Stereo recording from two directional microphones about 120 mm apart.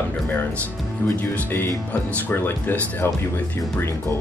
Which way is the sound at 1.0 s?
10° left (ahead or behind).